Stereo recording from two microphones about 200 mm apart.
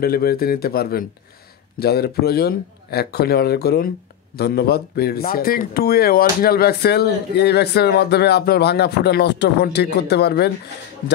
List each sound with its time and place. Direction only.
0.0 s speech: 50° left (ahead or behind)